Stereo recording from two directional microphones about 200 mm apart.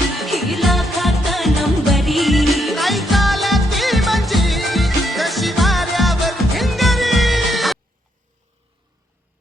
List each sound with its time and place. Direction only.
0.2 s music: centre (ahead or behind)